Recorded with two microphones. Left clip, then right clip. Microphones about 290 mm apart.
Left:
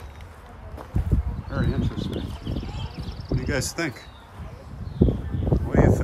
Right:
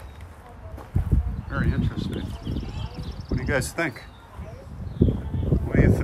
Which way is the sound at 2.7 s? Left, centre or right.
Left.